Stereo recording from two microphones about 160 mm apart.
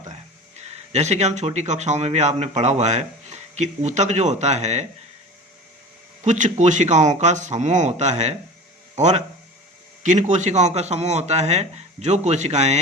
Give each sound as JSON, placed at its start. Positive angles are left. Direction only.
{"t": 0.5, "sound": "speech", "side_deg": -45}
{"t": 6.2, "sound": "speech", "side_deg": -50}